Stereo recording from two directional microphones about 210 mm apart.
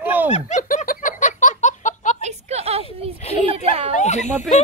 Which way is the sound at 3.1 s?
30° left (ahead or behind).